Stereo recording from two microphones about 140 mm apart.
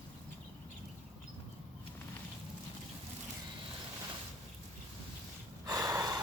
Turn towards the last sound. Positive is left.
turn(degrees=-25)  # may be behind; listen again after turning